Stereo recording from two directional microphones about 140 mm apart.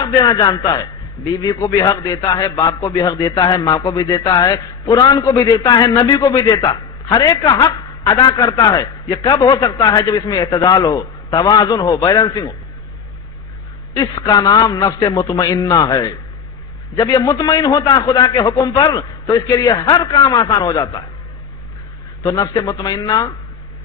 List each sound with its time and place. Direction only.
0.0 s a man's voice: 30° left (ahead or behind)
13.9 s a man's voice: 30° left (ahead or behind)
22.2 s a man's voice: 25° left (ahead or behind)